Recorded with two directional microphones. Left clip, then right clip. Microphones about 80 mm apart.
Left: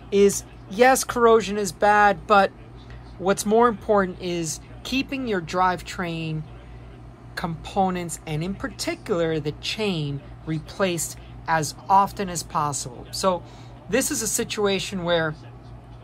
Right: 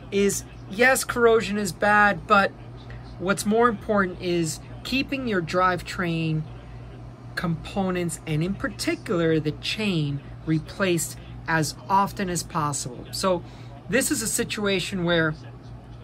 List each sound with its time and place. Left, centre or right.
0.7 s a woman's voice: left
7.3 s a woman's voice: left